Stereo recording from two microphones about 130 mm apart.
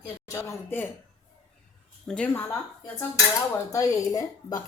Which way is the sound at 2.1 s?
10° left (ahead or behind).